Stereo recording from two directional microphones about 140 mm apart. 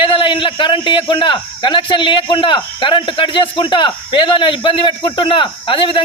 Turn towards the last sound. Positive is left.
turn(degrees=35)  # may be behind; listen again after turning